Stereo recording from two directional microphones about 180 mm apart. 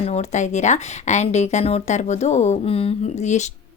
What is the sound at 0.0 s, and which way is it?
Speech, 40° left (ahead or behind).